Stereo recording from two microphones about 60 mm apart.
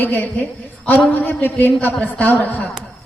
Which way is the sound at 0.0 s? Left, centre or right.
Left.